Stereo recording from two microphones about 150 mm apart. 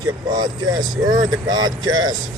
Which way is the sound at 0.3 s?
30° right (ahead or behind).